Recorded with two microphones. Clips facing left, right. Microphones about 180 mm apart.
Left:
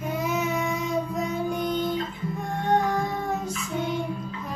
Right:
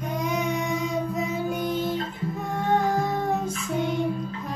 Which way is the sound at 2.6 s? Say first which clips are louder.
Even; centre (ahead or behind).